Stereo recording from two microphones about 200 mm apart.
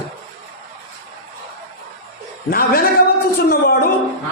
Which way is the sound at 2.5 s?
50° left (ahead or behind).